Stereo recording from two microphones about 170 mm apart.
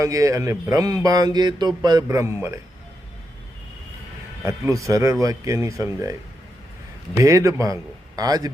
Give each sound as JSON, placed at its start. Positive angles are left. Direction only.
{"t": 0.0, "sound": "speech", "side_deg": -20}
{"t": 4.4, "sound": "speech", "side_deg": -15}
{"t": 7.2, "sound": "speech", "side_deg": -20}